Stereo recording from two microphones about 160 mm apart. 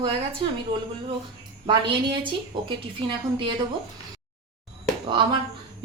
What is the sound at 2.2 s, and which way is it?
Speech, 30° right (ahead or behind).